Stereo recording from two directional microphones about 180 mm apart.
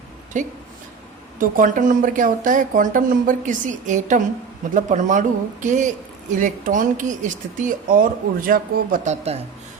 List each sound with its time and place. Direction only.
1.4 s speech: 45° right (ahead or behind)